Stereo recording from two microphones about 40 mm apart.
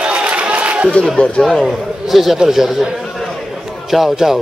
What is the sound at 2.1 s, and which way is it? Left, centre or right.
Speech, centre.